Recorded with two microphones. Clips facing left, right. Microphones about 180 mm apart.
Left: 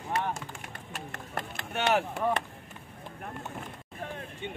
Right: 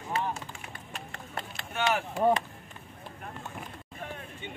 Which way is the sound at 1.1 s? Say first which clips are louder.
Left 3 dB; 50° left (ahead or behind).